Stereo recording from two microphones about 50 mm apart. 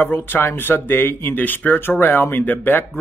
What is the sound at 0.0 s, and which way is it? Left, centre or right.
Speech, left.